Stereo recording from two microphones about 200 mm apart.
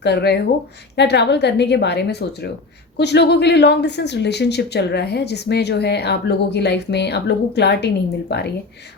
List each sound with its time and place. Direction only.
0.0 s speech: 55° left (ahead or behind)